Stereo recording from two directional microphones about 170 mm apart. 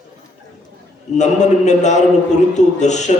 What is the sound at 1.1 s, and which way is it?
A man's voice, 45° left (ahead or behind).